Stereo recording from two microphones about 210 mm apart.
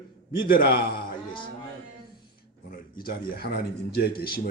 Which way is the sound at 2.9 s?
45° left (ahead or behind).